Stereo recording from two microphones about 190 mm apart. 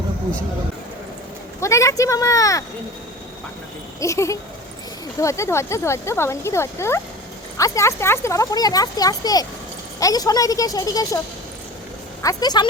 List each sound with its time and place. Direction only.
1.6 s speech: 15° left (ahead or behind)
4.0 s speech: 15° left (ahead or behind)
12.2 s speech: 20° left (ahead or behind)